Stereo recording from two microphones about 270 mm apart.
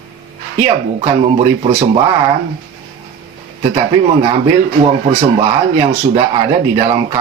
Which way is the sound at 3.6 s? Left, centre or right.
Right.